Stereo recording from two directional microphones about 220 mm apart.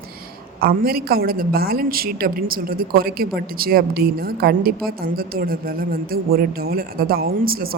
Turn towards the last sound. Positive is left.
turn(degrees=-45)  # may be behind; listen again after turning